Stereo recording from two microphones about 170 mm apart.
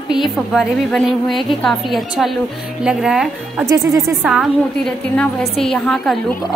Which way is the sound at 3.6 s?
20° right (ahead or behind).